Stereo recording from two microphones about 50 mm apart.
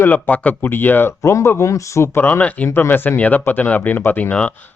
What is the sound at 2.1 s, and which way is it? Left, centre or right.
Speech, left.